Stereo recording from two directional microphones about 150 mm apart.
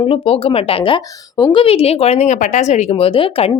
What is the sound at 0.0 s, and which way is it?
A woman's voice, 40° left (ahead or behind).